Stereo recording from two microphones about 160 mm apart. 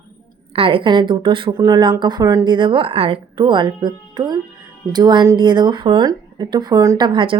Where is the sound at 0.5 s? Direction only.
35° right (ahead or behind).